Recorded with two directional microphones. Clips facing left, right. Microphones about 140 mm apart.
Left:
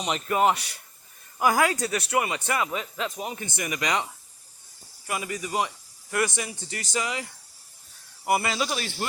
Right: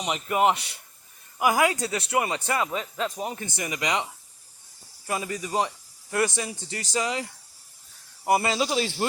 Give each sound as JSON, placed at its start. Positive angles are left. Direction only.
{"t": 0.0, "sound": "speech", "side_deg": -15}
{"t": 5.0, "sound": "a man's voice", "side_deg": -30}